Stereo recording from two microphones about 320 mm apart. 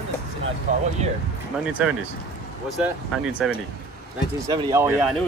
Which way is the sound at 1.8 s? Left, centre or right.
Centre.